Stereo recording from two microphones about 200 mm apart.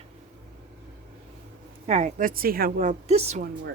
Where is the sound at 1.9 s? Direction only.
35° right (ahead or behind).